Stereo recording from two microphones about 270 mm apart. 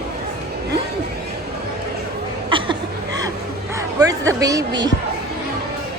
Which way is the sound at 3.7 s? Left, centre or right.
Centre.